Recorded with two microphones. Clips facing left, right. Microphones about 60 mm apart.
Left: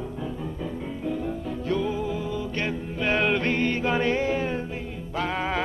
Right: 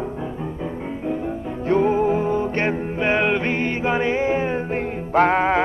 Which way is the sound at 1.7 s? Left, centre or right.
Right.